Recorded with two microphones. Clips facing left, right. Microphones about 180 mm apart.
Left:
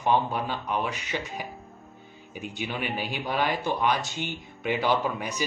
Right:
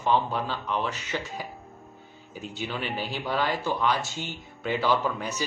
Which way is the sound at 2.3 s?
15° left (ahead or behind).